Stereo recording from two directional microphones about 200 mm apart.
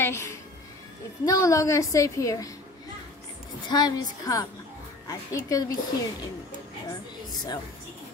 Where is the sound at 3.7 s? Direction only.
20° left (ahead or behind).